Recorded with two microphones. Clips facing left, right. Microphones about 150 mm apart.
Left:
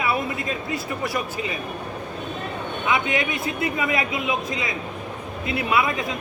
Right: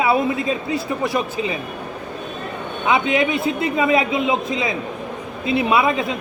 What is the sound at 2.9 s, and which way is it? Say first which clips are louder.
A man's voice: right 6 dB; 25° right (ahead or behind).